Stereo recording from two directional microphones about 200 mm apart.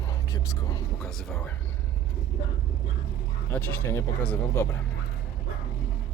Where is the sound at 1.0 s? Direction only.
Centre (ahead or behind).